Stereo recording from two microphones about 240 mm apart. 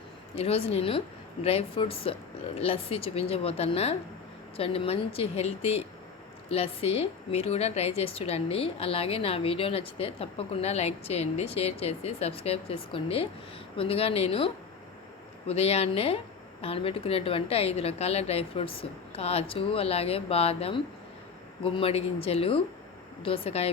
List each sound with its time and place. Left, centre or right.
0.3 s a woman's voice: left